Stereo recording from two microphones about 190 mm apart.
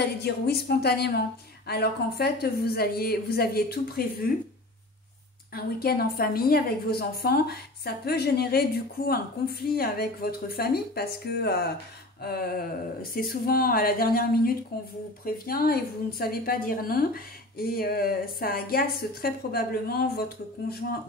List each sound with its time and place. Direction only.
0.0 s a woman's voice: 60° left (ahead or behind)
5.5 s a woman's voice: 55° left (ahead or behind)
12.2 s a sound: 55° left (ahead or behind)
13.0 s a woman's voice: 50° left (ahead or behind)